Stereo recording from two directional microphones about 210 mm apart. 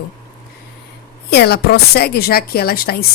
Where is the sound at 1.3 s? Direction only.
50° left (ahead or behind).